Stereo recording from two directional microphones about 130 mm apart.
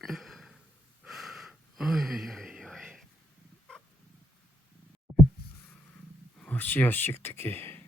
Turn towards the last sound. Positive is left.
turn(degrees=15)  # may be behind; listen again after turning